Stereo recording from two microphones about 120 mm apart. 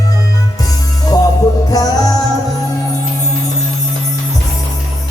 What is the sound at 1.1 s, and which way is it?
Music, 30° left (ahead or behind).